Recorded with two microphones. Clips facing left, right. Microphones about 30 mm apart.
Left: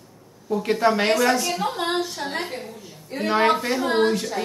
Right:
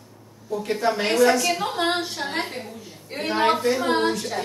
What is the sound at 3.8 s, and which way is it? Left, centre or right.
Speech, centre.